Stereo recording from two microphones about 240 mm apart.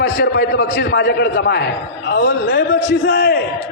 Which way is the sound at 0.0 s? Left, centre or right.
Left.